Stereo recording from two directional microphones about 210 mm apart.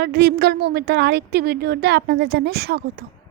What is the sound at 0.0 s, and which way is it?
A woman's voice, 50° right (ahead or behind).